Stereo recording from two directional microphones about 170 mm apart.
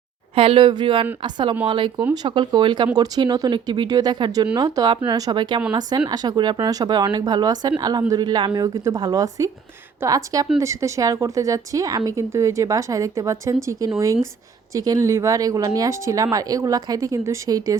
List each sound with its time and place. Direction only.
0.3 s speech: 30° right (ahead or behind)